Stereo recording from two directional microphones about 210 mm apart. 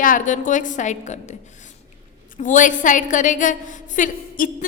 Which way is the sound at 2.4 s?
35° left (ahead or behind).